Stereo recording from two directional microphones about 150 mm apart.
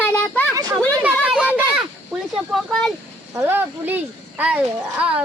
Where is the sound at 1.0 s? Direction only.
5° right (ahead or behind).